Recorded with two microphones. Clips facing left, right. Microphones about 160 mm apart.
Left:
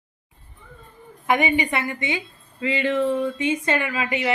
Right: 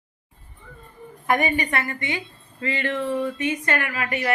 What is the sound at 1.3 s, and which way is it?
A woman's voice, 20° left (ahead or behind).